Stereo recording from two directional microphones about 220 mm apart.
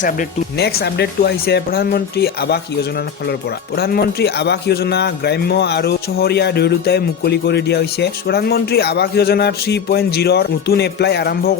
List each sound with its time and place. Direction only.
0.0 s a man's voice: 40° left (ahead or behind)
3.8 s a man's voice: 45° left (ahead or behind)